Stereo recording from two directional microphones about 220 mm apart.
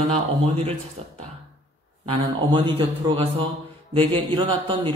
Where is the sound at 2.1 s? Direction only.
25° right (ahead or behind).